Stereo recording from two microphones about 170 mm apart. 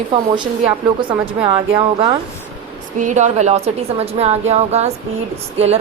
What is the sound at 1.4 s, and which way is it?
Speech, 35° right (ahead or behind).